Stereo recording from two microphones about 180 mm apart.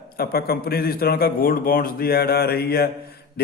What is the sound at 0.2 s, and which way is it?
A man's voice, 55° left (ahead or behind).